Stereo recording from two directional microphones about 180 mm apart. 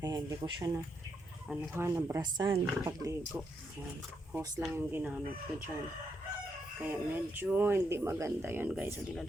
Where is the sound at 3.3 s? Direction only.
10° right (ahead or behind).